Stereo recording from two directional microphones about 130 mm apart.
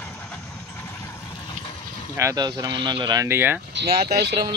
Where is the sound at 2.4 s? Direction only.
35° right (ahead or behind).